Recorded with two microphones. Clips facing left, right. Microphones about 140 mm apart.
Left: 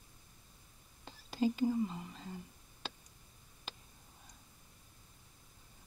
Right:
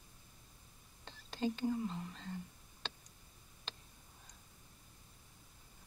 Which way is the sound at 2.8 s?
5° left (ahead or behind).